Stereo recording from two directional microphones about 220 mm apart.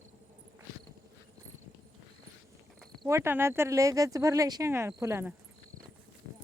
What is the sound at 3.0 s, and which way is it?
Speech, 10° right (ahead or behind).